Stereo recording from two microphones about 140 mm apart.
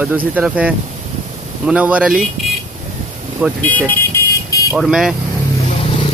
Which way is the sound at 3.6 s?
10° left (ahead or behind).